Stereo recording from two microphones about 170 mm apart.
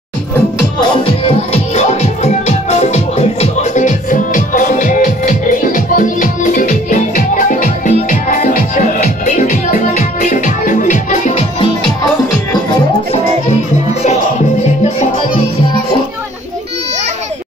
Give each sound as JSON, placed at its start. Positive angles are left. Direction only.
{"t": 0.7, "sound": "music", "side_deg": 30}
{"t": 15.0, "sound": "music", "side_deg": 35}